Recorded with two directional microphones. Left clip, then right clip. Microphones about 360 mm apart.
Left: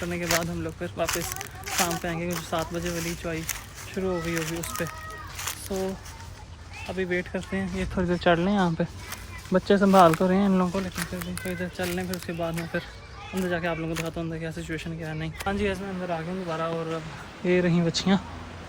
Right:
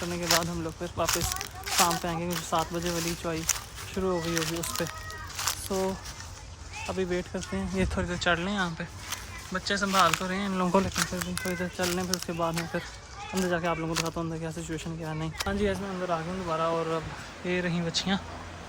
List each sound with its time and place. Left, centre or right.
0.0 s speech: centre
5.7 s speech: centre
6.9 s speech: centre
7.9 s speech: centre
10.7 s speech: centre
17.4 s speech: centre